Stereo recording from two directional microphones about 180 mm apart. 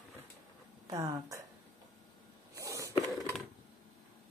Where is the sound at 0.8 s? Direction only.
20° right (ahead or behind).